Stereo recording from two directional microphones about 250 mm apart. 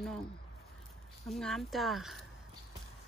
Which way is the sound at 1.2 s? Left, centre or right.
Centre.